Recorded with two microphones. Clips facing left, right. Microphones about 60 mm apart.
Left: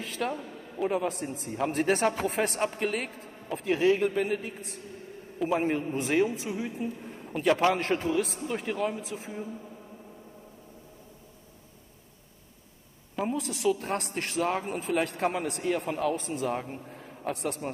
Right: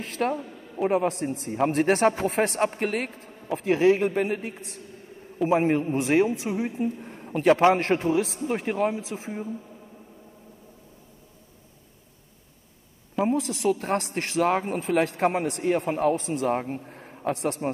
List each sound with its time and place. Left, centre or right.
0.0 s a sound: right
0.7 s a man's voice: right
1.0 s a man's voice: right
3.5 s a man's voice: right
9.1 s a man's voice: right
13.3 s a man's voice: right
16.6 s a sound: right
17.3 s a man's voice: right